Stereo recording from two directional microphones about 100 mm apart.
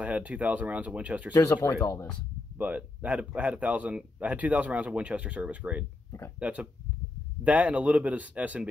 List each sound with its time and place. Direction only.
0.0 s speech: 15° right (ahead or behind)
1.4 s speech: 25° left (ahead or behind)
2.5 s speech: 15° right (ahead or behind)